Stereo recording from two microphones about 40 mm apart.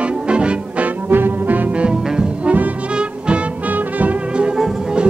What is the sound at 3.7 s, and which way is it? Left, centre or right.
Music, right.